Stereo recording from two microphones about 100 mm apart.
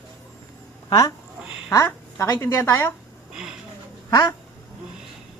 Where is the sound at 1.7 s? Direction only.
30° left (ahead or behind).